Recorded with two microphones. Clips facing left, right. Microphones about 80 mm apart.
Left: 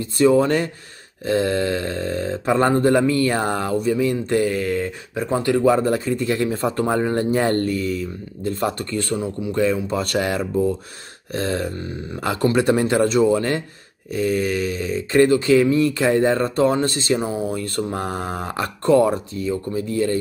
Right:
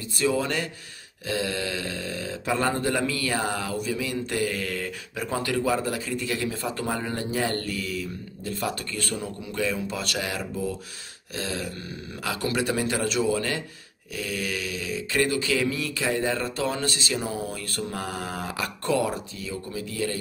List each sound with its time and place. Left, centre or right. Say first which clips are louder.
0.0 s speech: left 10 dB; left
17.2 s speech: left 7 dB; left